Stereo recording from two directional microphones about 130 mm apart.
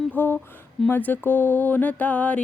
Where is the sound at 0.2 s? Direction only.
15° left (ahead or behind).